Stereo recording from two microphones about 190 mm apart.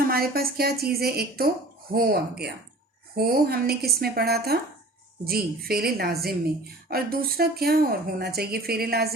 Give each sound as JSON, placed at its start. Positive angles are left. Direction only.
{"t": 0.1, "sound": "a woman's voice", "side_deg": -50}